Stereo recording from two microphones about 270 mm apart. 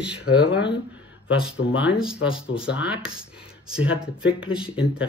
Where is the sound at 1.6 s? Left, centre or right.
Left.